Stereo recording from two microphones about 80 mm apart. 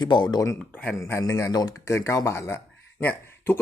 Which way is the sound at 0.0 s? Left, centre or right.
Left.